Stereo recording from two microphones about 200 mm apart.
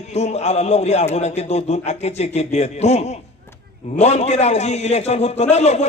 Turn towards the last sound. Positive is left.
turn(degrees=35)  # may be behind; listen again after turning